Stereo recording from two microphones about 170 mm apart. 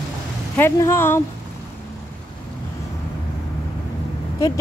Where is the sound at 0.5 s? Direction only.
15° left (ahead or behind).